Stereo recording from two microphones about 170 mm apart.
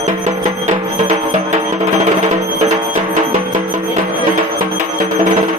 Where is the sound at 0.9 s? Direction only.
45° right (ahead or behind).